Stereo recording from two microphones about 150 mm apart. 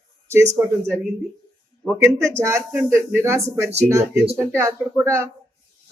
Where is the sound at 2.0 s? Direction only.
20° right (ahead or behind).